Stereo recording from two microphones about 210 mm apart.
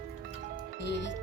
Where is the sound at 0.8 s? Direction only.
55° left (ahead or behind).